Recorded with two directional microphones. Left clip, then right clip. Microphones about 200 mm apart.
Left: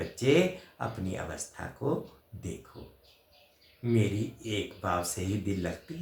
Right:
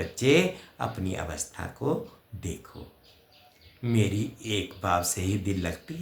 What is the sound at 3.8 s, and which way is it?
Speech, 40° right (ahead or behind).